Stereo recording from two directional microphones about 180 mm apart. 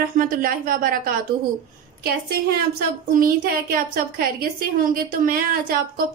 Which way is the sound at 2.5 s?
55° right (ahead or behind).